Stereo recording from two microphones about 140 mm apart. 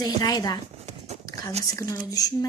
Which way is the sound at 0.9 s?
55° right (ahead or behind).